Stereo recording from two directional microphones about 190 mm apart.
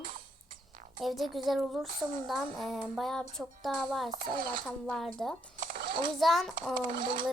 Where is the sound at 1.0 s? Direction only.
Centre (ahead or behind).